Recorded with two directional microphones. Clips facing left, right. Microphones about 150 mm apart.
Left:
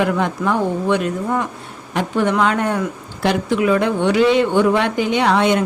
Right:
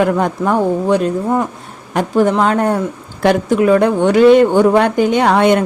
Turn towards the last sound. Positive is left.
turn(degrees=-55)  # may be behind; listen again after turning